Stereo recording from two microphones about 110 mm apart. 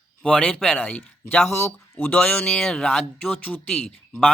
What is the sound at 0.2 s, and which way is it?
Speech, 10° left (ahead or behind).